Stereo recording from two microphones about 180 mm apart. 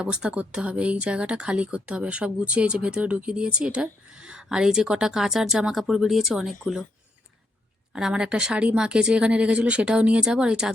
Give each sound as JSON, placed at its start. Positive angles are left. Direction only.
{"t": 0.0, "sound": "speech", "side_deg": -5}
{"t": 7.9, "sound": "speech", "side_deg": -5}